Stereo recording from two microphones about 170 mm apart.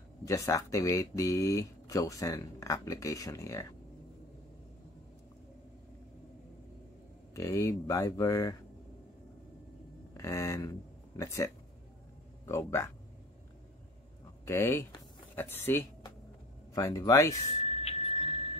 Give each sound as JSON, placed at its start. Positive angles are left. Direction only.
{"t": 0.2, "sound": "speech", "side_deg": 20}
{"t": 7.3, "sound": "speech", "side_deg": 20}
{"t": 10.1, "sound": "speech", "side_deg": 15}
{"t": 14.4, "sound": "speech", "side_deg": 15}
{"t": 17.6, "sound": "a sound", "side_deg": 35}